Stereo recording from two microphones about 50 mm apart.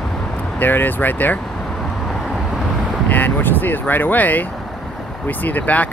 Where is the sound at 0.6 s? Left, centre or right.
Left.